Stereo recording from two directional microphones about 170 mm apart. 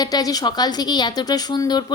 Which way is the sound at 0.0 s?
20° left (ahead or behind).